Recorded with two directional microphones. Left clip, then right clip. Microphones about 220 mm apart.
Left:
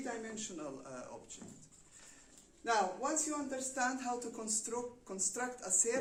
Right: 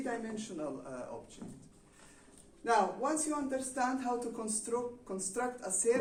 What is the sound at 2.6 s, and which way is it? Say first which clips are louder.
Speech: right 4 dB; 15° left (ahead or behind).